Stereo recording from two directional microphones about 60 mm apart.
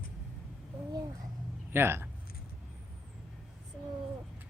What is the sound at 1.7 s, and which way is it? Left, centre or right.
Speech, right.